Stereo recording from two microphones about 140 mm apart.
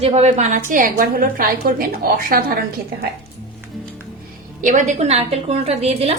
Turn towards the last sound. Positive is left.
turn(degrees=-45)  # may be behind; listen again after turning